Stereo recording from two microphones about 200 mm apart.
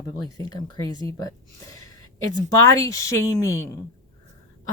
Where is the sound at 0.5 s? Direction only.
20° left (ahead or behind).